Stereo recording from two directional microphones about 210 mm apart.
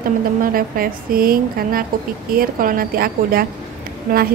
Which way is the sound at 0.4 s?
45° right (ahead or behind).